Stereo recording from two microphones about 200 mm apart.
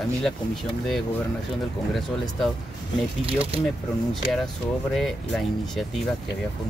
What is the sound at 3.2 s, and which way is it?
Speech, 30° right (ahead or behind).